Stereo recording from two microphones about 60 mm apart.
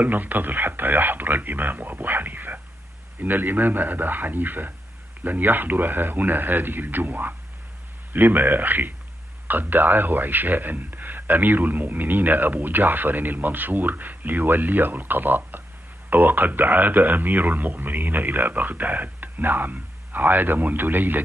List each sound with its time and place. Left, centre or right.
0.0 s a man's voice: right